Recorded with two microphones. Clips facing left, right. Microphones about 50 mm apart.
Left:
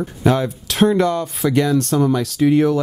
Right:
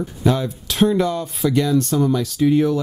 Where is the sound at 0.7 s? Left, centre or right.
Left.